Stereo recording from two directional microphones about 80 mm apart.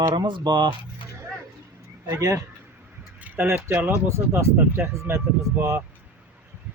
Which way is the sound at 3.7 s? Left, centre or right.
Right.